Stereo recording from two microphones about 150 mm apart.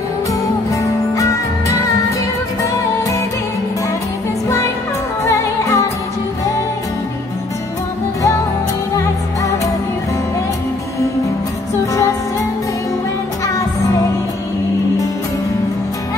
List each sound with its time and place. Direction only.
0.3 s music: 20° left (ahead or behind)
5.2 s music: 15° left (ahead or behind)
11.8 s music: 20° left (ahead or behind)